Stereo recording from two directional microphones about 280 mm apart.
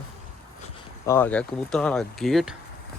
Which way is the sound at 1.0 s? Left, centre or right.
Centre.